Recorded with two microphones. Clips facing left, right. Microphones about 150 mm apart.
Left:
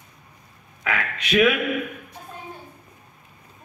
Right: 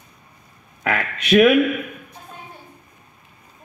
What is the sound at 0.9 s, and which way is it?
Speech, 45° right (ahead or behind).